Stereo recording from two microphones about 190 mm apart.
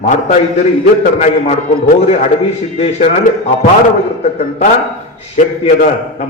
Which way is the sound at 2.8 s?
35° left (ahead or behind).